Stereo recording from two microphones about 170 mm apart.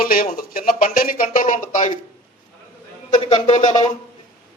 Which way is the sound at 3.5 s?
25° left (ahead or behind).